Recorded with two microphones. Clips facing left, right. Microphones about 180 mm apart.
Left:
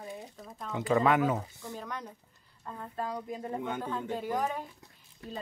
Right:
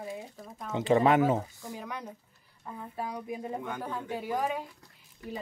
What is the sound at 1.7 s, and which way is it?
Speech, 10° right (ahead or behind).